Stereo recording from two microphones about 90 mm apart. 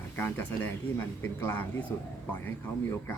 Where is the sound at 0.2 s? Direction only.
25° left (ahead or behind).